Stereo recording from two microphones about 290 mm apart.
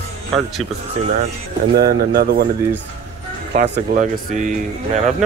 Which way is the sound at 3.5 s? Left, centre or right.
Right.